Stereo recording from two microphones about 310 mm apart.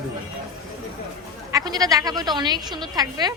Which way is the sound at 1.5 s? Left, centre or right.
Centre.